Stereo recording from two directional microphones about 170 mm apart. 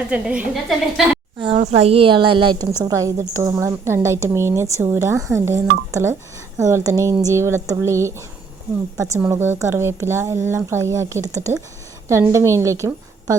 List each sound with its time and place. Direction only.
0.1 s a woman's voice: 5° right (ahead or behind)
1.5 s a woman's voice: 40° right (ahead or behind); by 13.3 s 20° right (ahead or behind)